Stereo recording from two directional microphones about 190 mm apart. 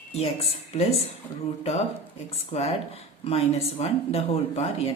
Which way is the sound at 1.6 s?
30° left (ahead or behind).